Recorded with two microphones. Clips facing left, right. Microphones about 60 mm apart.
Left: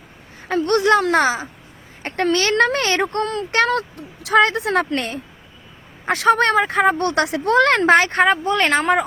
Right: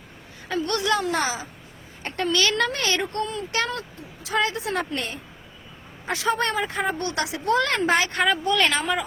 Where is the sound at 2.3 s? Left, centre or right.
Left.